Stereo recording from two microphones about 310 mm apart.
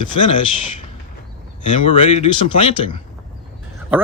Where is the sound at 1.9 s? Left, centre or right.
Centre.